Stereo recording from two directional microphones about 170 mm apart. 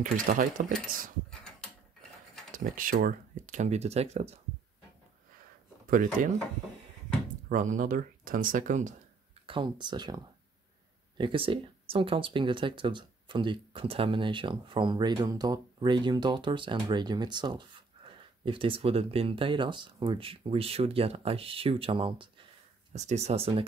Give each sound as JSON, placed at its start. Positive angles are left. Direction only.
{"t": 0.0, "sound": "speech", "side_deg": -55}
{"t": 2.5, "sound": "speech", "side_deg": -55}
{"t": 6.2, "sound": "speech", "side_deg": -50}
{"t": 7.4, "sound": "speech", "side_deg": -50}
{"t": 9.5, "sound": "speech", "side_deg": -25}
{"t": 22.9, "sound": "speech", "side_deg": -40}